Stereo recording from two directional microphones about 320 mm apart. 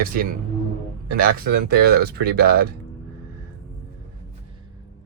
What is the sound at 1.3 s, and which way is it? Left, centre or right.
Speech, right.